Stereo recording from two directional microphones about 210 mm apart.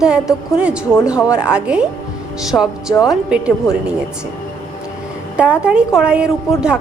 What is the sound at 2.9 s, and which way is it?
Speech, 15° left (ahead or behind).